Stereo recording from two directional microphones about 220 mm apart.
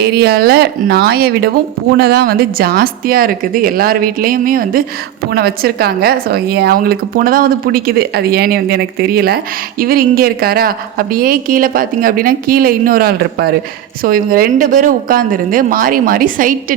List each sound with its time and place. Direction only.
0.2 s a woman's voice: 45° right (ahead or behind)